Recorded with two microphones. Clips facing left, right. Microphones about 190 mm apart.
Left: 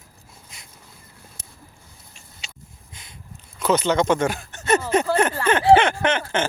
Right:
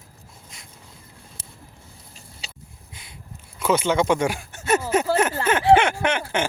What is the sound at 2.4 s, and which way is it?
Sniff, 35° right (ahead or behind).